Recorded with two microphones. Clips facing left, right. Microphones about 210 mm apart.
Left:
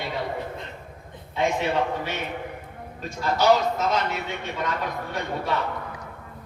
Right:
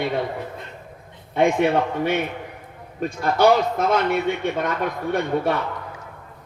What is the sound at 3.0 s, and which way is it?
A man's voice, 55° right (ahead or behind).